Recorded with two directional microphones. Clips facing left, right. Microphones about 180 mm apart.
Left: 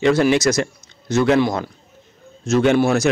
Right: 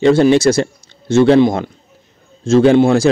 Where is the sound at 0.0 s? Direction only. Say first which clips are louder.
Right 5 dB; 30° right (ahead or behind).